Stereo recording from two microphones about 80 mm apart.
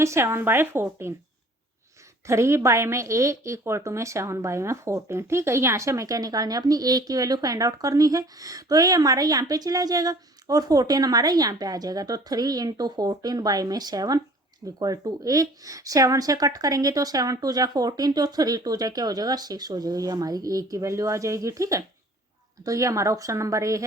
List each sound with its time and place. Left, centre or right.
0.0 s a woman's voice: right
2.2 s a woman's voice: right